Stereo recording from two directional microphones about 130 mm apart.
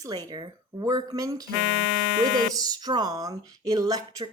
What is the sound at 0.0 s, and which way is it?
Speech, 30° right (ahead or behind).